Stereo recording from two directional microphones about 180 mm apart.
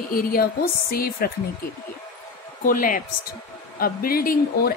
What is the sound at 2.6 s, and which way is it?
Speech, 50° left (ahead or behind).